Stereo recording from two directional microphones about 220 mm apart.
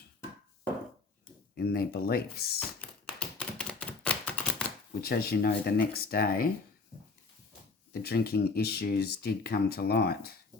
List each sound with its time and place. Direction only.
1.5 s speech: 45° left (ahead or behind)
3.1 s typewriter: 5° left (ahead or behind)
4.9 s speech: 45° left (ahead or behind)
8.0 s speech: 45° left (ahead or behind)